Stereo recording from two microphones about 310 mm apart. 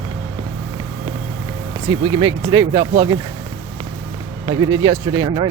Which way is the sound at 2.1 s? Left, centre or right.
Centre.